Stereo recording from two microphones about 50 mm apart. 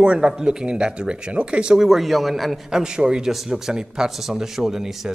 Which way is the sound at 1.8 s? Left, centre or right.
Centre.